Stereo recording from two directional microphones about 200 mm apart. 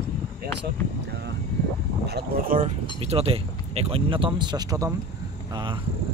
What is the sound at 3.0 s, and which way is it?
Speech, 30° right (ahead or behind).